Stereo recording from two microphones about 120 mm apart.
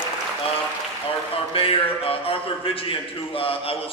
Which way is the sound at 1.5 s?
50° left (ahead or behind).